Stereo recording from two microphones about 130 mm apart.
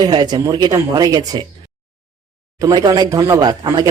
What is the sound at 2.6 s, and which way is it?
Speech, 30° right (ahead or behind).